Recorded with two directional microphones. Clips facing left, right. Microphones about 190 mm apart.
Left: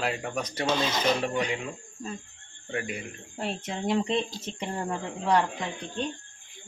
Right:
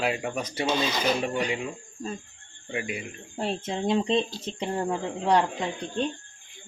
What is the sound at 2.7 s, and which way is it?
Speech, 10° right (ahead or behind).